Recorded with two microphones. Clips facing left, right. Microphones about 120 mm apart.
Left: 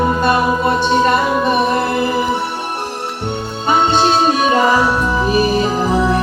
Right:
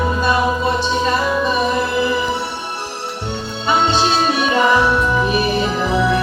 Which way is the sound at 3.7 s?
45° left (ahead or behind).